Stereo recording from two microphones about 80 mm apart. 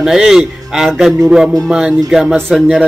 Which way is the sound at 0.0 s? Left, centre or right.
Centre.